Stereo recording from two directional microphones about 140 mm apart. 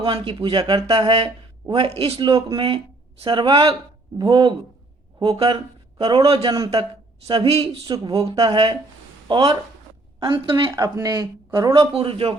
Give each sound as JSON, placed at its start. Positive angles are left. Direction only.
{"t": 0.0, "sound": "a woman's voice", "side_deg": -40}
{"t": 10.8, "sound": "speech", "side_deg": -25}
{"t": 11.8, "sound": "a woman's voice", "side_deg": -40}